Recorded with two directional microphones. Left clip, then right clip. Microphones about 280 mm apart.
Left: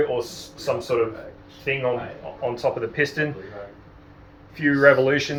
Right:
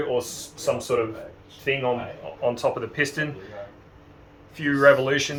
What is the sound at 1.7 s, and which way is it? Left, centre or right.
Speech, centre.